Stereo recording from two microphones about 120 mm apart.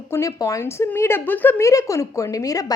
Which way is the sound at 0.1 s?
25° left (ahead or behind).